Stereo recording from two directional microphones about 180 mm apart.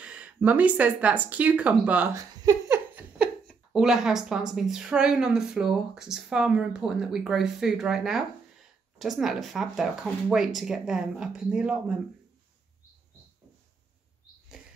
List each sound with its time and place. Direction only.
0.0 s speech: 10° right (ahead or behind)
2.1 s a sound: 20° right (ahead or behind)
3.2 s a woman's voice: 5° right (ahead or behind)